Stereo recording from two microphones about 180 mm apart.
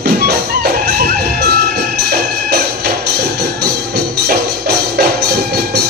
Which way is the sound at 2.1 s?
60° right (ahead or behind).